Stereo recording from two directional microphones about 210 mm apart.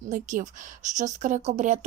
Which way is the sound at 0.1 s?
35° right (ahead or behind).